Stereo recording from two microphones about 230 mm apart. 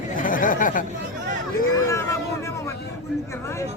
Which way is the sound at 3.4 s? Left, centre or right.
Centre.